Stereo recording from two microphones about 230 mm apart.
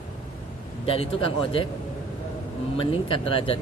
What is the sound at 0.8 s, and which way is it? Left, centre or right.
Speech, left.